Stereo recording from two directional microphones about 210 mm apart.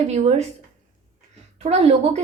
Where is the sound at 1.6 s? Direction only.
30° right (ahead or behind).